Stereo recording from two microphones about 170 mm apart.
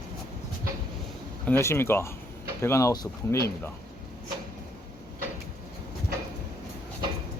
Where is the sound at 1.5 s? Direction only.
15° left (ahead or behind).